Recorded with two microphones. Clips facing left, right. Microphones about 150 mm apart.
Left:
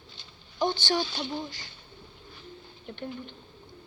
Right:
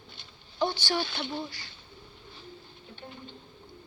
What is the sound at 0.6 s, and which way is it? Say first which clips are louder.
Speech: left 2 dB; 20° left (ahead or behind).